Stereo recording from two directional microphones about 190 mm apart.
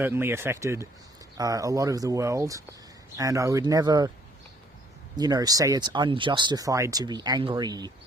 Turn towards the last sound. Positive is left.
turn(degrees=-20)  # may be behind; listen again after turning